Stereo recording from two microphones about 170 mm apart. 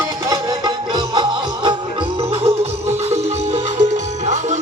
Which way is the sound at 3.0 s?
40° right (ahead or behind).